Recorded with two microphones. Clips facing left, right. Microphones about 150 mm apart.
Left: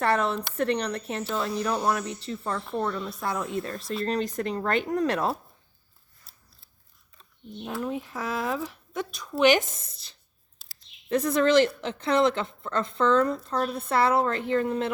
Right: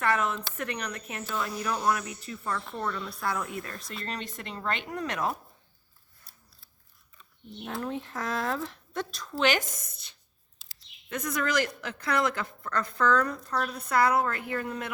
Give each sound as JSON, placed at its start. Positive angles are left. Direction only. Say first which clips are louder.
{"t": 0.0, "sound": "a woman's voice", "louder": "left 3 dB", "side_deg": 35}
{"t": 7.6, "sound": "speech", "louder": "left 3 dB", "side_deg": 10}
{"t": 9.3, "sound": "a woman's voice", "louder": "left 6 dB", "side_deg": 20}